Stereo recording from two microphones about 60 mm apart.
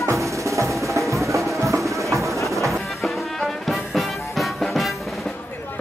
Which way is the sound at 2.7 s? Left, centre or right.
Centre.